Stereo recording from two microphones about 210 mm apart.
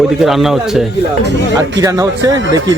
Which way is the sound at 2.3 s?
60° right (ahead or behind).